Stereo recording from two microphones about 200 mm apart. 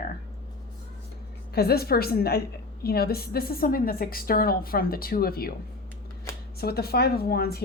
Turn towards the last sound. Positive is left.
turn(degrees=50)  # may be behind; listen again after turning